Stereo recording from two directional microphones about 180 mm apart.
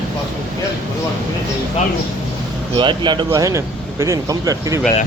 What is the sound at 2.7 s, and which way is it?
Speech, 25° right (ahead or behind).